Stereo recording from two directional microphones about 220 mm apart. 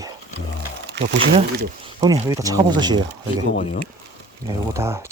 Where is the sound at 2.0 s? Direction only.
15° right (ahead or behind).